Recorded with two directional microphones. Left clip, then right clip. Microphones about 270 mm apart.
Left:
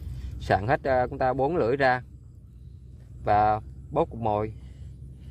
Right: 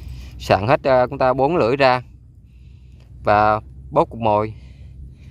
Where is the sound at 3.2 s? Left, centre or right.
Centre.